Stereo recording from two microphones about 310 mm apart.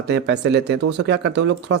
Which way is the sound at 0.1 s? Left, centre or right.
Right.